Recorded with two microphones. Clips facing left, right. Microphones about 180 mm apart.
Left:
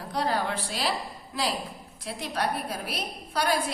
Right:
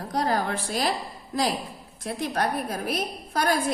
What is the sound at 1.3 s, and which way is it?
A woman's voice, 45° right (ahead or behind).